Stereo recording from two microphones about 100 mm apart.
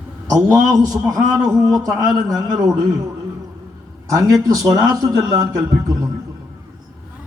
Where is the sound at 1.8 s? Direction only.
Centre (ahead or behind).